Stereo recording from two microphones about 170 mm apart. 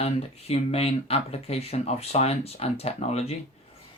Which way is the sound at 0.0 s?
35° left (ahead or behind).